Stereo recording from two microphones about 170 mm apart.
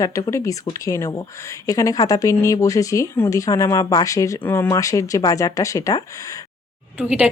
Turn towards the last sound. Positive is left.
turn(degrees=-5)  # may be behind; listen again after turning